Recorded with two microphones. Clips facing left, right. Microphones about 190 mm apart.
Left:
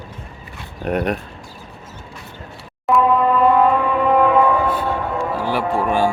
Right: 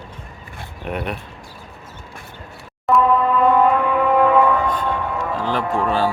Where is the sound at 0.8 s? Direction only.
45° left (ahead or behind).